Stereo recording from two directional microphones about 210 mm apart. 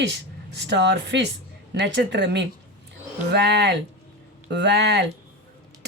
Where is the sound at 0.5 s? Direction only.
55° right (ahead or behind).